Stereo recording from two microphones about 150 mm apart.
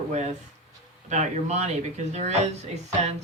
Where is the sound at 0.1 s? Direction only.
50° right (ahead or behind).